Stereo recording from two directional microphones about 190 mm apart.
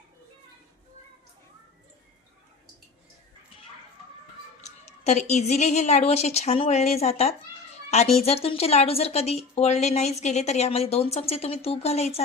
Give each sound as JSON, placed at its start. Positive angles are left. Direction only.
{"t": 5.0, "sound": "a woman's voice", "side_deg": 35}